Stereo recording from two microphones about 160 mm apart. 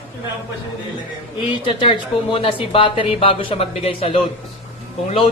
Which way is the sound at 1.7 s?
30° left (ahead or behind).